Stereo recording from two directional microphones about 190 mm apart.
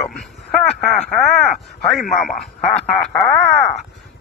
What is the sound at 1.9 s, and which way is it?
Speech, centre (ahead or behind).